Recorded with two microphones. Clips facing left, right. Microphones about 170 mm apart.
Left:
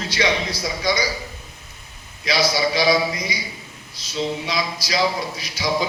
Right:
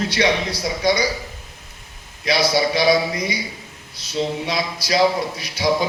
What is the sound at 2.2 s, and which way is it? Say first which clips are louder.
A man's voice: right 2 dB; 60° right (ahead or behind).